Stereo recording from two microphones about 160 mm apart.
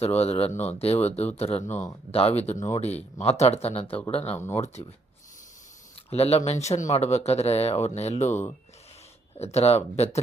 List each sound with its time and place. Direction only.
0.0 s speech: 40° left (ahead or behind)
6.1 s speech: 40° left (ahead or behind)